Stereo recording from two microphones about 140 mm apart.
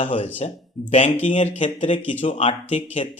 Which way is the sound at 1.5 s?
40° left (ahead or behind).